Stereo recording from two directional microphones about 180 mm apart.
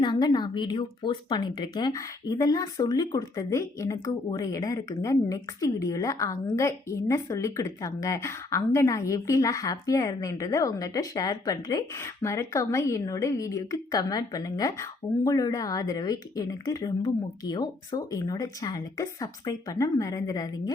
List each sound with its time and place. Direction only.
0.0 s speech: 25° left (ahead or behind)